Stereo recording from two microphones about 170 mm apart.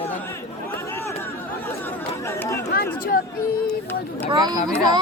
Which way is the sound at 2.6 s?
65° left (ahead or behind).